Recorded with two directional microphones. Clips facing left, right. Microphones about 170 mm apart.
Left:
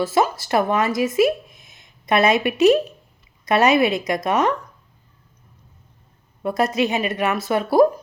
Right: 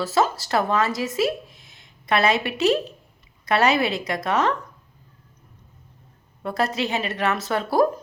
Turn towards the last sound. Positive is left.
turn(degrees=10)  # may be behind; listen again after turning